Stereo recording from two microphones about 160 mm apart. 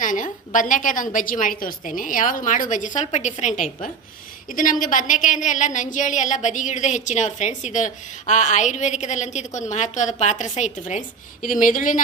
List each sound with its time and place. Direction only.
0.0 s a woman's voice: 55° left (ahead or behind)